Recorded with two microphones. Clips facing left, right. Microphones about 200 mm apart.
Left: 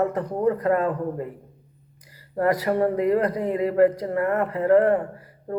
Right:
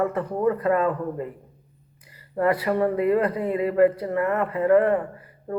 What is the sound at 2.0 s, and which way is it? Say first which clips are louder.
Speech: even; 40° left (ahead or behind).